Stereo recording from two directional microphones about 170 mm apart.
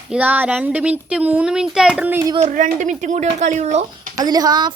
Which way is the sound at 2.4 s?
45° right (ahead or behind).